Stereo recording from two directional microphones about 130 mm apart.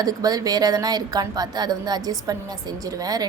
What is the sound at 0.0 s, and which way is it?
A woman's voice, 30° right (ahead or behind).